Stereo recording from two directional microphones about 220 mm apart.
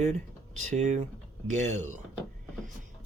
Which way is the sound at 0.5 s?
35° right (ahead or behind).